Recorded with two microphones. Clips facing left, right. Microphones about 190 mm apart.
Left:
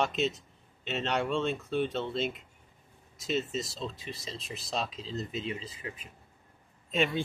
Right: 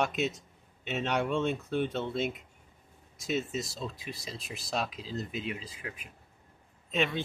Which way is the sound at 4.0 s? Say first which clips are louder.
Even; centre (ahead or behind).